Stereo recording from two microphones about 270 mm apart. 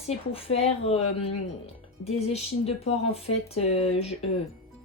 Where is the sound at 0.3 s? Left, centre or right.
Left.